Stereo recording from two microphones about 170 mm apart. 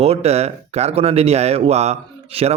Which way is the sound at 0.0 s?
35° right (ahead or behind).